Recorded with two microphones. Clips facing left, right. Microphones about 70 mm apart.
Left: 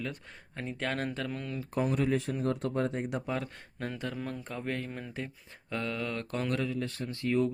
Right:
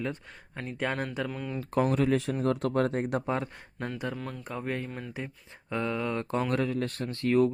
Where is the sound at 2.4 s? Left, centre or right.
Right.